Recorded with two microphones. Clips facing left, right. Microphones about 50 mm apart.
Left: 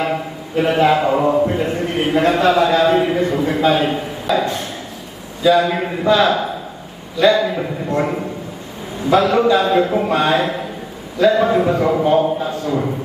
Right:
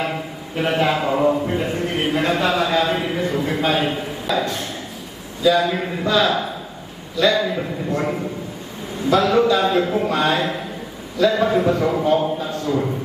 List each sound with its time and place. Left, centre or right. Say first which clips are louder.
0.0 s a man's voice: left 4 dB; centre
5.6 s a man's voice: left 5 dB; centre
7.3 s a man's voice: left 3 dB; centre
10.1 s a man's voice: left 3 dB; left
11.3 s a man's voice: left 3 dB; centre
12.6 s a man's voice: even; centre